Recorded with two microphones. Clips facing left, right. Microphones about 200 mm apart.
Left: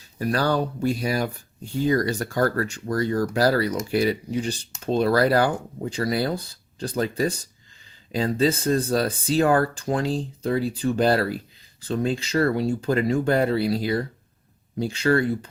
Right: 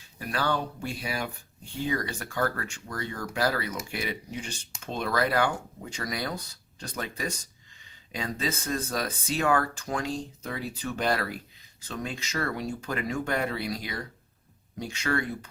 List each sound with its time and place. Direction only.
0.2 s speech: 40° left (ahead or behind)